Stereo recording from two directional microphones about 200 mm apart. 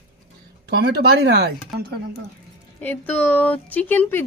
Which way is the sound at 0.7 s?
55° right (ahead or behind).